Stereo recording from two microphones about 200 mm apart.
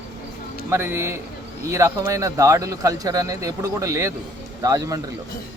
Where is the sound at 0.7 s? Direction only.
10° right (ahead or behind).